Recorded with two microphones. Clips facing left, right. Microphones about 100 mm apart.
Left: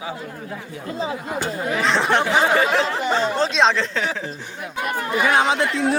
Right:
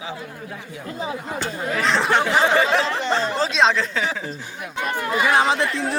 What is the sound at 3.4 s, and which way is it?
Speech, centre (ahead or behind).